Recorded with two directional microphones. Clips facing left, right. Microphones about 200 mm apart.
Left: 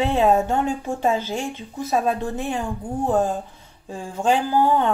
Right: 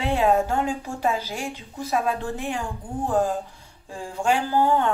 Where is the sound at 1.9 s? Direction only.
30° left (ahead or behind).